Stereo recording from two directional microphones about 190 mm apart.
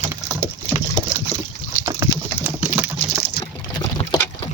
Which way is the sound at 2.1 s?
10° right (ahead or behind).